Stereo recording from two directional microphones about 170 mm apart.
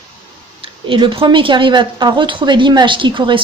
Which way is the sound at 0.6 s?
30° right (ahead or behind).